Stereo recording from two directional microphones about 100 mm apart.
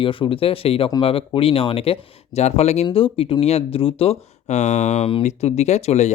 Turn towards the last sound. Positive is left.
turn(degrees=90)